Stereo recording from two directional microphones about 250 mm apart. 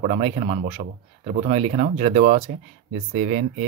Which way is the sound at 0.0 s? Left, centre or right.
Right.